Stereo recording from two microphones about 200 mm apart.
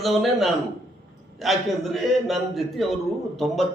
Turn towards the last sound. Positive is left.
turn(degrees=0)  # may be behind; listen again after turning